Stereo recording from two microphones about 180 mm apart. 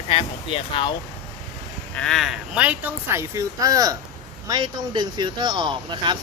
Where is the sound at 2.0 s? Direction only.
Centre (ahead or behind).